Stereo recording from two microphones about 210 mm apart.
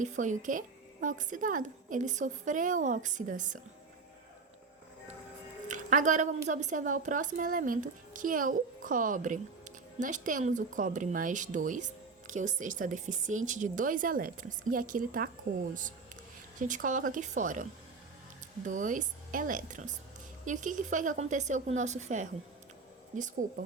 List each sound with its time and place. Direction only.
0.0 s a woman's voice: 35° right (ahead or behind)
5.6 s a woman's voice: 35° right (ahead or behind)
16.6 s a woman's voice: 40° right (ahead or behind)